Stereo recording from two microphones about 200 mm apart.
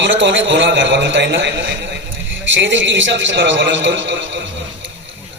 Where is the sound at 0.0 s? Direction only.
65° right (ahead or behind).